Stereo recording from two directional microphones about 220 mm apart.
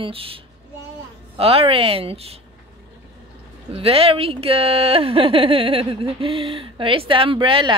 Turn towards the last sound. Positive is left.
turn(degrees=-20)  # may be behind; listen again after turning